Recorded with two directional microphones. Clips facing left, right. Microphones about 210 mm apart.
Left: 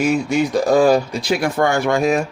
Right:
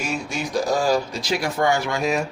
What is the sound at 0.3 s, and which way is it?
Speech, 60° left (ahead or behind).